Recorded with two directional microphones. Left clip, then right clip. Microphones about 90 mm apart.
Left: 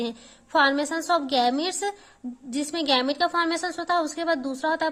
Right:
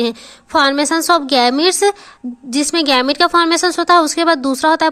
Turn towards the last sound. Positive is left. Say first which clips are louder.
# right 12 dB
turn(degrees=-40)  # may be behind; listen again after turning